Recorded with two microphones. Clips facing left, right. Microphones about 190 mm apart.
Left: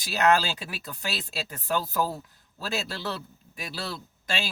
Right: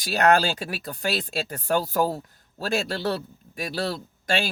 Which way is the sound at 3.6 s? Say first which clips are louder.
Right 7 dB; 45° right (ahead or behind).